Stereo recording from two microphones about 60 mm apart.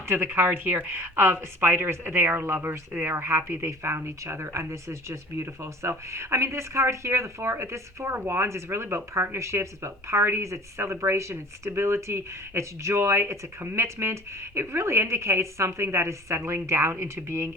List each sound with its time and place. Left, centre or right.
0.1 s speech: right